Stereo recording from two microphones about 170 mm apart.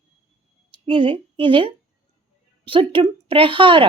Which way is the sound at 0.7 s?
30° right (ahead or behind).